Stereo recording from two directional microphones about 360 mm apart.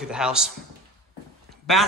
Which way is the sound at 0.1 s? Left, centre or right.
Centre.